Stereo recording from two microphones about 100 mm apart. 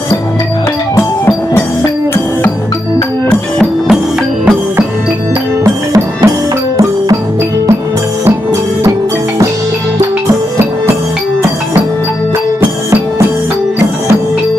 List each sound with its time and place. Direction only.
0.9 s music: 25° left (ahead or behind)
5.6 s music: 30° right (ahead or behind)